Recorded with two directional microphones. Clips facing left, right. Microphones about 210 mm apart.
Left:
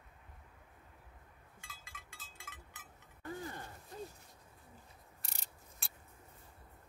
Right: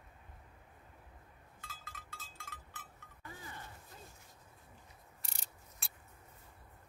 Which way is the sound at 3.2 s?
45° left (ahead or behind).